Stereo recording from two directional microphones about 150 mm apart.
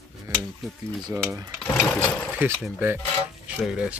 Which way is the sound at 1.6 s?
10° left (ahead or behind).